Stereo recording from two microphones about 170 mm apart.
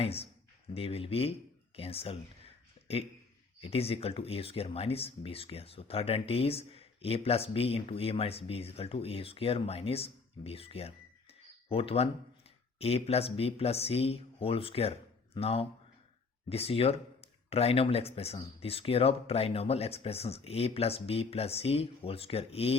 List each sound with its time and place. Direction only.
0.0 s speech: 35° left (ahead or behind)
3.6 s speech: 35° left (ahead or behind)